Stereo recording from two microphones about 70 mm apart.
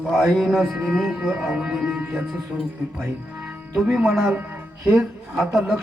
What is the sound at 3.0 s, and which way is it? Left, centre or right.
Speech, centre.